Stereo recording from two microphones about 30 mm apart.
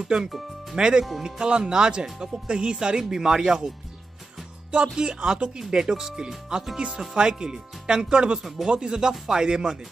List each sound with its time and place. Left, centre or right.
0.0 s speech: right
3.0 s speech: centre
4.7 s speech: right